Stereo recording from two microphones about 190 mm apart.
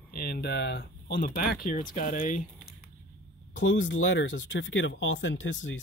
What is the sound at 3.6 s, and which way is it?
Speech, 75° left (ahead or behind).